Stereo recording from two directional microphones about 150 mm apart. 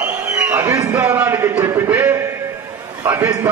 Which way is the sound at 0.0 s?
15° right (ahead or behind).